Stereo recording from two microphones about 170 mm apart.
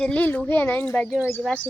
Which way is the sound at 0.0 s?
10° left (ahead or behind).